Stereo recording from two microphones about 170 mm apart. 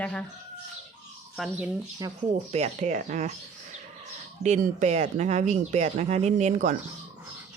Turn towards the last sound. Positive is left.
turn(degrees=-45)  # may be behind; listen again after turning